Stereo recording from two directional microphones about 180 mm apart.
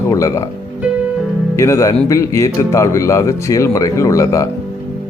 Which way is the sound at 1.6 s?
15° left (ahead or behind).